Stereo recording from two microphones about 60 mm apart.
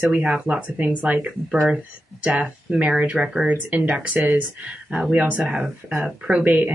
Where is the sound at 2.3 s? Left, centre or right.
Right.